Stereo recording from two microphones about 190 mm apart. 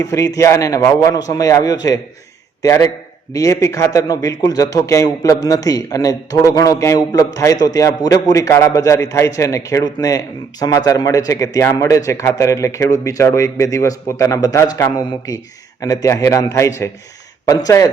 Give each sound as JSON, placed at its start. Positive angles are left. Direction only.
{"t": 0.0, "sound": "a man's voice", "side_deg": 15}